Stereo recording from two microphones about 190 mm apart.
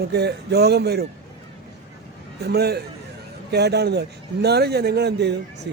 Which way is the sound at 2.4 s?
60° right (ahead or behind).